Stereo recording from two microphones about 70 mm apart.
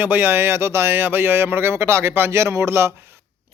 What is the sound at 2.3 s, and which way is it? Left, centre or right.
Speech, right.